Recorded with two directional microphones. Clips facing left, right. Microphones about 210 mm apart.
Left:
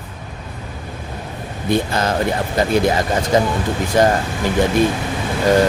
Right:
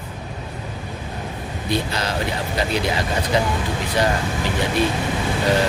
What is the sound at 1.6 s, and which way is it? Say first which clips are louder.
Speech: left 6 dB; 50° left (ahead or behind).